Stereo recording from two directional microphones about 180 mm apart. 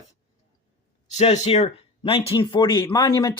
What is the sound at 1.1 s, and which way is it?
Speech, 35° left (ahead or behind).